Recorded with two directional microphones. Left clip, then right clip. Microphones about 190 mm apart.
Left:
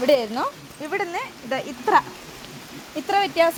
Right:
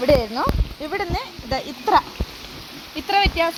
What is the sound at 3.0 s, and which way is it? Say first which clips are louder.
Speech: right 1 dB; 50° left (ahead or behind).